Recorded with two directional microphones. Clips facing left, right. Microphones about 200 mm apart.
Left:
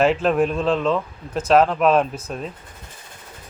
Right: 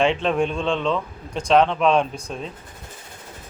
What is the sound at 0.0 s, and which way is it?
Speech, 5° left (ahead or behind).